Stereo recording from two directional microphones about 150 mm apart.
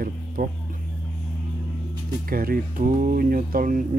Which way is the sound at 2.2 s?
75° right (ahead or behind).